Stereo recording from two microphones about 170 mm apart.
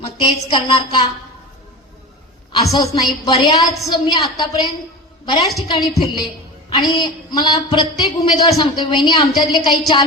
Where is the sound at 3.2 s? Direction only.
30° left (ahead or behind).